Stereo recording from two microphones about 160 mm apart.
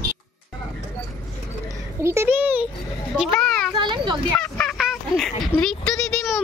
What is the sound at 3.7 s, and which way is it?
Children playing, 30° right (ahead or behind).